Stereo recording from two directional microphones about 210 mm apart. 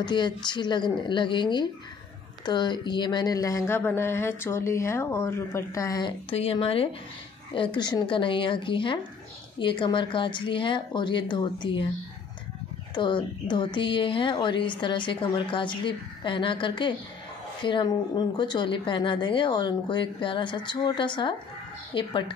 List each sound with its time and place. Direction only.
0.0 s a woman's voice: 20° left (ahead or behind)
12.9 s a woman's voice: 20° left (ahead or behind)